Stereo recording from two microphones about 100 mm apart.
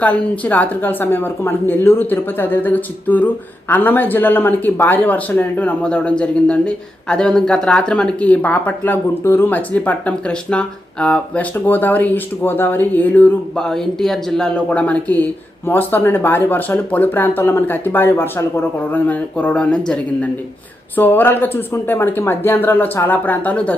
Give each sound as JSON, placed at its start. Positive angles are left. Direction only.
{"t": 0.0, "sound": "a woman's voice", "side_deg": 15}
{"t": 13.6, "sound": "a woman's voice", "side_deg": 5}